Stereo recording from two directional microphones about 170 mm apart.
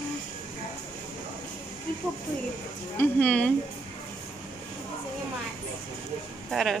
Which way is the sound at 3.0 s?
5° left (ahead or behind).